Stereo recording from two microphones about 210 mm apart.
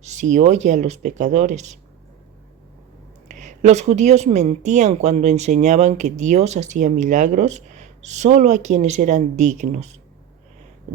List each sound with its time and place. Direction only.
0.0 s speech: 35° right (ahead or behind)
3.2 s speech: 35° right (ahead or behind)